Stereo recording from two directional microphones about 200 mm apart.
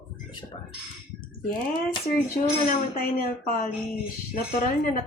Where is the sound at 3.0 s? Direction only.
45° left (ahead or behind).